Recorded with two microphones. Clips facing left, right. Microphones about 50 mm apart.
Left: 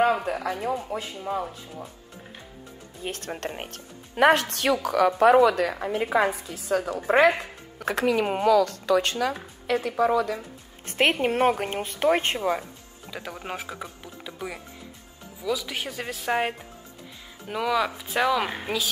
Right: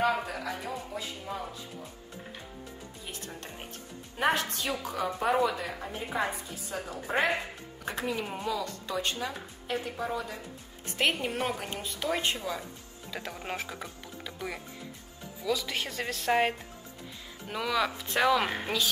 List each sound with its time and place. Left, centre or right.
0.0 s speech: left
3.0 s speech: left
10.9 s a woman's voice: left
13.3 s speech: centre